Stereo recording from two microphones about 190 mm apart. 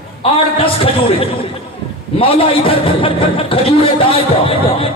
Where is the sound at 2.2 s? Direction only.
30° left (ahead or behind).